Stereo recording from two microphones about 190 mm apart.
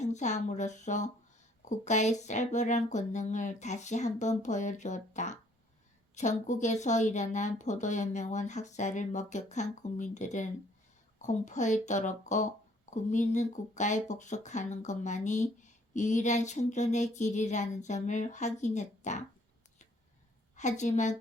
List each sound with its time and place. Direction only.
0.0 s a woman's voice: 40° left (ahead or behind)
20.6 s a woman's voice: 40° left (ahead or behind)